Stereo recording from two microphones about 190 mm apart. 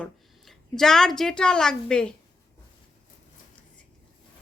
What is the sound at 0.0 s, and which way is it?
A woman's voice, centre (ahead or behind).